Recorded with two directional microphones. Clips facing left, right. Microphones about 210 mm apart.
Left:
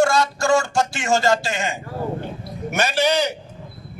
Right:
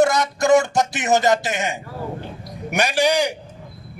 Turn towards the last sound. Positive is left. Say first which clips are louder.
# right 1 dB
turn(degrees=-15)  # may be behind; listen again after turning